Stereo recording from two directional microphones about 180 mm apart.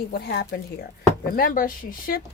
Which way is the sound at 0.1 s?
60° left (ahead or behind).